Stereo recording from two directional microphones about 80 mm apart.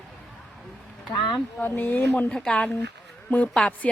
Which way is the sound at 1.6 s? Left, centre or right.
Left.